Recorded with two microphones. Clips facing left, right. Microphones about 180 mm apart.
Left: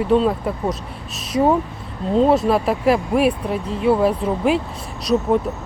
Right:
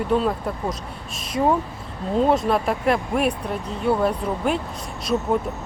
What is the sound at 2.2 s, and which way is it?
Speech, centre (ahead or behind).